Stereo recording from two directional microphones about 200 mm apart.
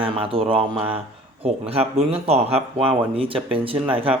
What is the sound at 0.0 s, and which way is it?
Speech, 25° right (ahead or behind).